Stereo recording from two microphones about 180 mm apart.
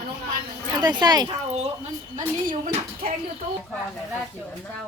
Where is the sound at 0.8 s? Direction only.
25° right (ahead or behind).